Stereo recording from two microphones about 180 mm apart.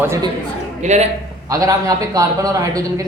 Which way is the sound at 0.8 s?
40° right (ahead or behind).